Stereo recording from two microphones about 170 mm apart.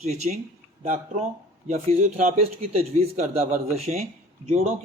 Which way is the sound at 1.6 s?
40° right (ahead or behind).